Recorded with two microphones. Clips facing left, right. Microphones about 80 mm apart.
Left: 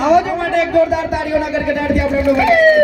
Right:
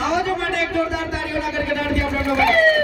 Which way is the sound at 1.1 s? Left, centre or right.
Left.